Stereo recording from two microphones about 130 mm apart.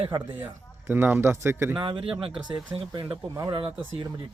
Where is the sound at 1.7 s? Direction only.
40° right (ahead or behind).